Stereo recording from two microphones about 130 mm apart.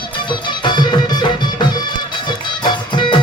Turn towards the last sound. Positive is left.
turn(degrees=35)  # may be behind; listen again after turning